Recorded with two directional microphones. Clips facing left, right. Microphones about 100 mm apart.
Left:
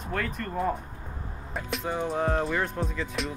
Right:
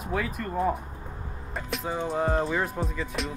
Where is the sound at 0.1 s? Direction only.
5° right (ahead or behind).